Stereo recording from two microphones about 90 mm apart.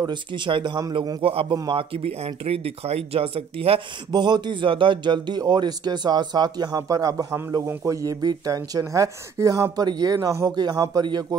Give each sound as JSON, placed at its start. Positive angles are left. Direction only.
{"t": 0.0, "sound": "speech", "side_deg": -60}
{"t": 1.2, "sound": "speech", "side_deg": -90}
{"t": 4.1, "sound": "a man's voice", "side_deg": -55}